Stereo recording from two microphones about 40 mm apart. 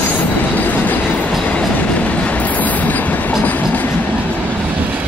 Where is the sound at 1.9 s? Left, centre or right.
Left.